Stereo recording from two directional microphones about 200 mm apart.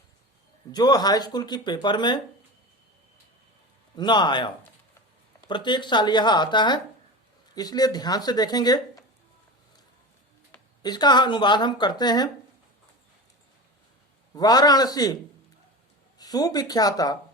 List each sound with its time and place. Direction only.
0.7 s speech: 20° left (ahead or behind)
3.9 s speech: 20° left (ahead or behind)
10.8 s speech: 20° left (ahead or behind)
14.3 s speech: 20° left (ahead or behind)